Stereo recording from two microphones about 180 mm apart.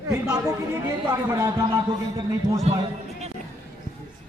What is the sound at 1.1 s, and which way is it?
A man's voice, 20° right (ahead or behind).